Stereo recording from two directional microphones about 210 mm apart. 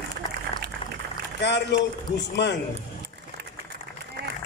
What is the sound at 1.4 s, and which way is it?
A man's voice, 55° left (ahead or behind).